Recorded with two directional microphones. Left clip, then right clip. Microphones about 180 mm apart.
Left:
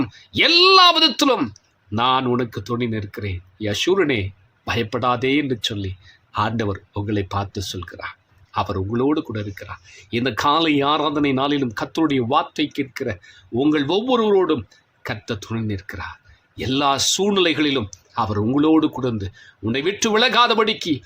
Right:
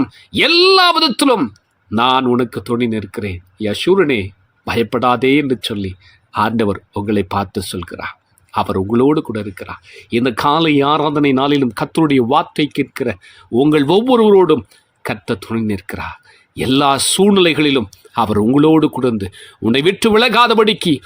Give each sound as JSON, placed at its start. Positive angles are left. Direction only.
{"t": 0.0, "sound": "speech", "side_deg": -35}